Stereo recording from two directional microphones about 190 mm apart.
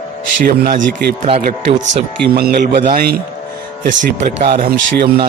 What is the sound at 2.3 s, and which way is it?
Speech, 55° right (ahead or behind).